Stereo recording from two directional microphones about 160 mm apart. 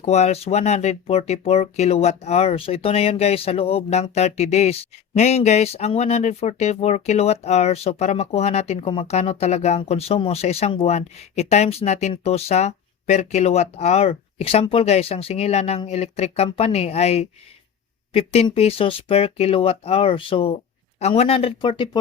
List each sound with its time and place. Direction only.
0.0 s speech: 45° left (ahead or behind)